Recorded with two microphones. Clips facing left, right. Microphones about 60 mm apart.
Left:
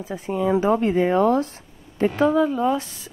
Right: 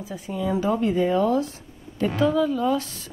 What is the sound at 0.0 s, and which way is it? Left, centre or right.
Speech, left.